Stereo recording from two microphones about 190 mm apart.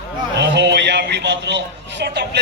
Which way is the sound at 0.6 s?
65° right (ahead or behind).